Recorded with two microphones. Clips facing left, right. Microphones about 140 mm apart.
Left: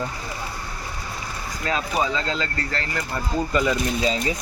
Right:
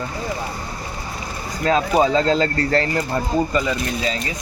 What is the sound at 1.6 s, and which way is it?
Speech, 35° right (ahead or behind).